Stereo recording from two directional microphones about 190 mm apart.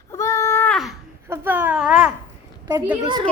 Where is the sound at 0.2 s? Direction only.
15° left (ahead or behind).